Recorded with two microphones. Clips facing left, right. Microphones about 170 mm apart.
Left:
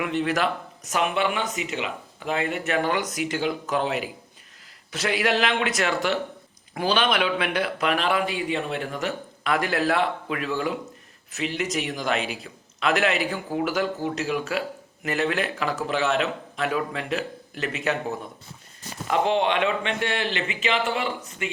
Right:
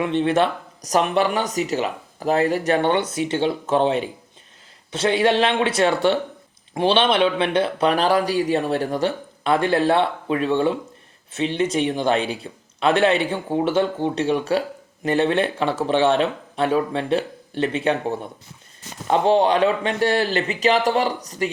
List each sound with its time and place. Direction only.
0.0 s speech: 25° right (ahead or behind)